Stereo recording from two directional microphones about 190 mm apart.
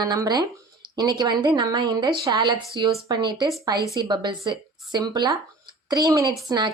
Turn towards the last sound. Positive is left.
turn(degrees=-25)  # may be behind; listen again after turning